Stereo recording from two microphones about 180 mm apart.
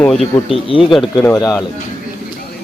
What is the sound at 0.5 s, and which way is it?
Speech, 30° left (ahead or behind).